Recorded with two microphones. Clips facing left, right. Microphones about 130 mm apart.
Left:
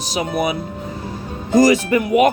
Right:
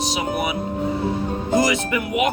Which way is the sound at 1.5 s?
40° left (ahead or behind).